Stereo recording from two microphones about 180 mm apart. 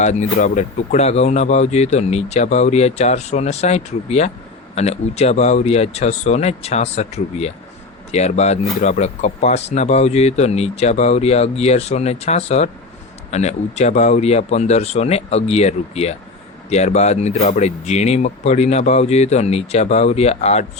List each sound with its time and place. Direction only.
0.0 s speech: 40° left (ahead or behind)